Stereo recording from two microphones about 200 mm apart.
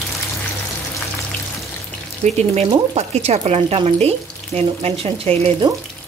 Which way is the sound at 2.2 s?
35° right (ahead or behind).